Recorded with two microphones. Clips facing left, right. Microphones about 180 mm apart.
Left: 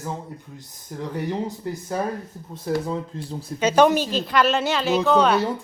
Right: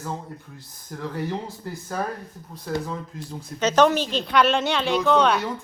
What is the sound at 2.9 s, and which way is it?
Speech, 30° left (ahead or behind).